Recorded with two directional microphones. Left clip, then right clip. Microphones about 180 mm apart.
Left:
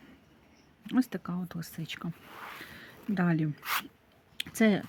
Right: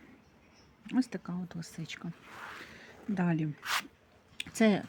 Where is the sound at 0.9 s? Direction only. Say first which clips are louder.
Left 3 dB; 20° left (ahead or behind).